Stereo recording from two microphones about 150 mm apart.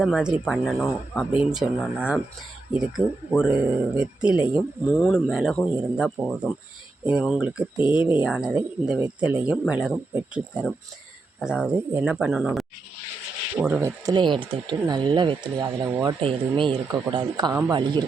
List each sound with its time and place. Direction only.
0.0 s speech: 5° right (ahead or behind)
4.9 s speech: 5° left (ahead or behind)
13.6 s speech: 10° right (ahead or behind)
14.1 s speech: 30° right (ahead or behind)